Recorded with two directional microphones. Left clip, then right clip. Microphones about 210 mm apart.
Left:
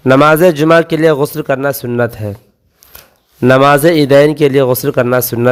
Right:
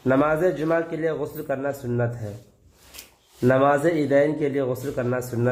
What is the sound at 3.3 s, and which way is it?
A man's voice, 45° left (ahead or behind).